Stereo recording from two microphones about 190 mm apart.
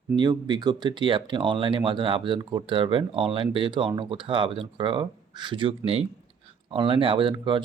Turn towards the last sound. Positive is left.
turn(degrees=-25)  # may be behind; listen again after turning